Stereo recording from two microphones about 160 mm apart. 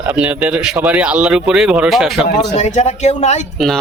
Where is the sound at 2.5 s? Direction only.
45° left (ahead or behind).